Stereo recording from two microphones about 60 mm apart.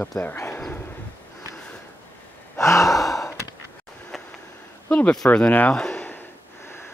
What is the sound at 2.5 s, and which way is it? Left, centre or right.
Gasp, left.